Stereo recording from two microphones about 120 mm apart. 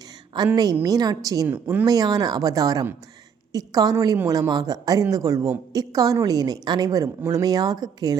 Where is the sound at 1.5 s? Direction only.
15° right (ahead or behind).